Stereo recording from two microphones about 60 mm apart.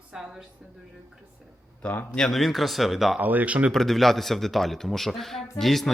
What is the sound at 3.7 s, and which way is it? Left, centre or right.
Speech, centre.